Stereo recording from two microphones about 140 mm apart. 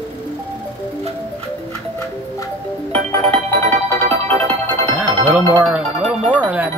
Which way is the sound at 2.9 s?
50° right (ahead or behind).